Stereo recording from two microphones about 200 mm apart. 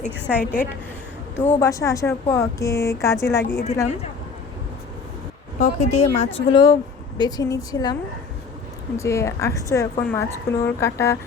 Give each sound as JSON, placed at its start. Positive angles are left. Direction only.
{"t": 0.1, "sound": "a woman's voice", "side_deg": -10}
{"t": 1.5, "sound": "a woman's voice", "side_deg": 15}
{"t": 5.5, "sound": "speech", "side_deg": 35}
{"t": 9.0, "sound": "a woman's voice", "side_deg": 15}